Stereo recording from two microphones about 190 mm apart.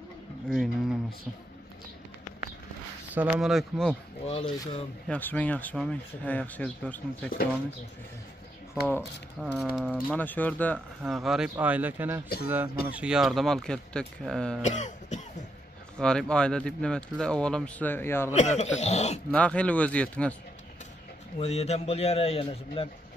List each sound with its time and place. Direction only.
0.5 s speech: centre (ahead or behind)
3.2 s speech: centre (ahead or behind)
4.3 s speech: 30° left (ahead or behind)
5.0 s speech: 5° left (ahead or behind)
9.4 s speech: centre (ahead or behind)
10.0 s speech: 10° left (ahead or behind)
11.1 s speech: 5° right (ahead or behind)
14.6 s speech: 40° left (ahead or behind)
16.0 s speech: 5° left (ahead or behind)
18.3 s a man's voice: 35° left (ahead or behind)
19.3 s speech: 5° left (ahead or behind)
21.4 s a man's voice: 35° left (ahead or behind)